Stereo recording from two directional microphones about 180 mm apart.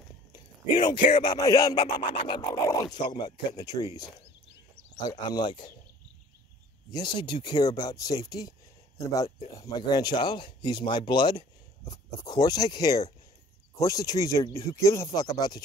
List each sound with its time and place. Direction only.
0.3 s a sound: 25° left (ahead or behind)
1.2 s speech: 20° left (ahead or behind)
6.9 s speech: 25° left (ahead or behind)